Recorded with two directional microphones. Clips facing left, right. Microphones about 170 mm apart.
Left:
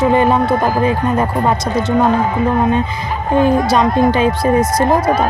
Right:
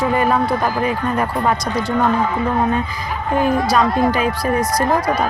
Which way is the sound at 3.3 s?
25° left (ahead or behind).